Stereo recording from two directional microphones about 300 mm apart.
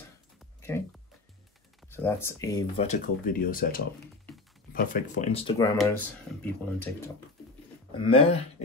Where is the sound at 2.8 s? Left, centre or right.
Left.